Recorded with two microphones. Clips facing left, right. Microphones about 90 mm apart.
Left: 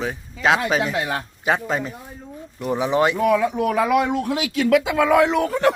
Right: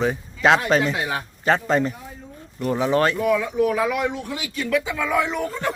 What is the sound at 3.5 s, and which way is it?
Speech, 60° left (ahead or behind).